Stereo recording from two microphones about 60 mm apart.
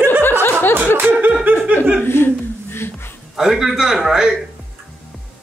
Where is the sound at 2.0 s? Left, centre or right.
Left.